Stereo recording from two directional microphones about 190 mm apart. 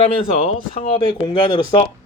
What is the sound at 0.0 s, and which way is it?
Speech, 35° left (ahead or behind).